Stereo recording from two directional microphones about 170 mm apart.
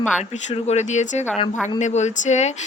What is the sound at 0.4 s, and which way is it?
Speech, 40° left (ahead or behind).